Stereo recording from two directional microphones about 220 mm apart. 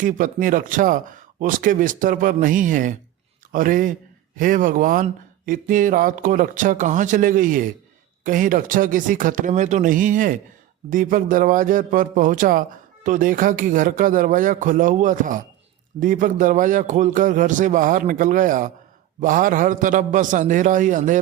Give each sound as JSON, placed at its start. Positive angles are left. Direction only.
{"t": 0.0, "sound": "a man's voice", "side_deg": -35}